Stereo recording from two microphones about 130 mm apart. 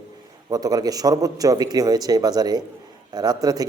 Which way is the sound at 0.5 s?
30° right (ahead or behind).